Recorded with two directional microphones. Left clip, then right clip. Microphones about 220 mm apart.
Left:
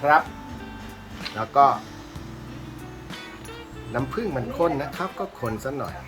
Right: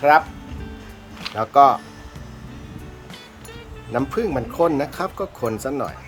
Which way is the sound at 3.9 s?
35° right (ahead or behind).